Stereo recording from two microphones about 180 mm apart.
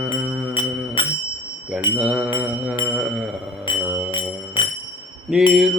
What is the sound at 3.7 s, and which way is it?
Music, 25° left (ahead or behind).